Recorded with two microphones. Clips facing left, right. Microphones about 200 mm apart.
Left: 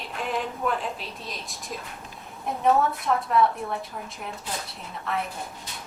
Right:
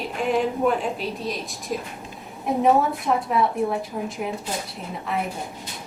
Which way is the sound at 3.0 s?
Centre (ahead or behind).